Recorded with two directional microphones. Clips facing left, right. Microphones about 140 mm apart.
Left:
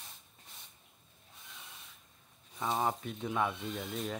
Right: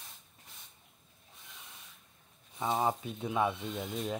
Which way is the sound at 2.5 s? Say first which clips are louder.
Right 2 dB; 15° right (ahead or behind).